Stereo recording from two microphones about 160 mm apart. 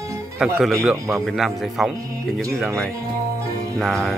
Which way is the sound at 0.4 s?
Centre (ahead or behind).